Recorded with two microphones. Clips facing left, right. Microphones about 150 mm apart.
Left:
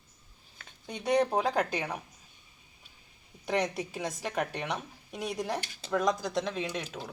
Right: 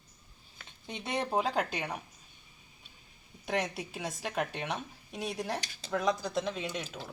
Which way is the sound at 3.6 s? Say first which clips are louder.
Left 3 dB; 5° right (ahead or behind).